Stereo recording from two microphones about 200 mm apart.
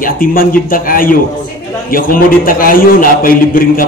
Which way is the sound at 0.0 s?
45° left (ahead or behind).